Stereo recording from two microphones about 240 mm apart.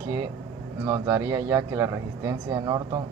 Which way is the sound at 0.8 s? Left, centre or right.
Centre.